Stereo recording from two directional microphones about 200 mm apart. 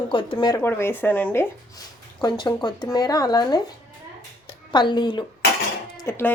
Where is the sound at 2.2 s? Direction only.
20° left (ahead or behind).